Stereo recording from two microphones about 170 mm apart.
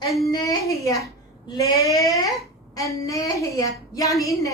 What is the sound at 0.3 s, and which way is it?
A woman's voice, 20° left (ahead or behind).